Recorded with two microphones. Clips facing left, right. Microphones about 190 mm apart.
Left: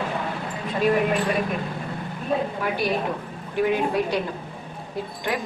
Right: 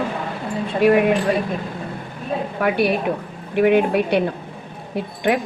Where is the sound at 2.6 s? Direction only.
65° right (ahead or behind).